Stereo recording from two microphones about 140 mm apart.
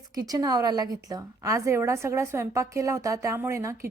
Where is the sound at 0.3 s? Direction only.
25° right (ahead or behind).